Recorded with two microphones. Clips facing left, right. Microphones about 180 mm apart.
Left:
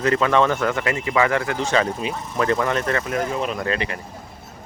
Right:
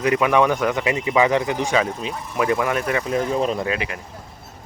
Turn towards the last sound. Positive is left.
turn(degrees=-5)  # may be behind; listen again after turning